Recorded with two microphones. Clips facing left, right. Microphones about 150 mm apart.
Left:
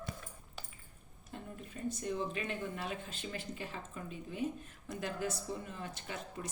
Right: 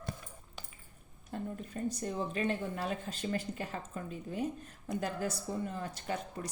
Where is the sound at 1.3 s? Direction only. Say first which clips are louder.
Right 7 dB; 40° right (ahead or behind).